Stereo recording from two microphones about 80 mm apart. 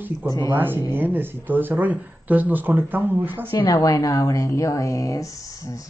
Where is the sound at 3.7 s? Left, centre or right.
Left.